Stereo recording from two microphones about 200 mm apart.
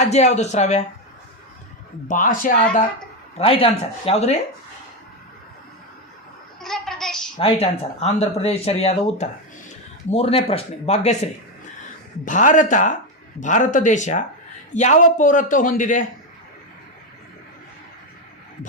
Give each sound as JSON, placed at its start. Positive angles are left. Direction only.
{"t": 0.0, "sound": "speech", "side_deg": 35}
{"t": 2.0, "sound": "speech", "side_deg": 40}
{"t": 3.3, "sound": "speech", "side_deg": 30}
{"t": 6.6, "sound": "a sound", "side_deg": 0}
{"t": 7.3, "sound": "speech", "side_deg": 30}